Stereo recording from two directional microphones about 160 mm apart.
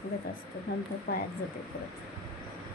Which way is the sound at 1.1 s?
70° left (ahead or behind).